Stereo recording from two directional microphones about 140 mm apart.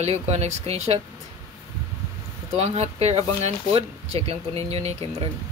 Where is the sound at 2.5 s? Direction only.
50° right (ahead or behind).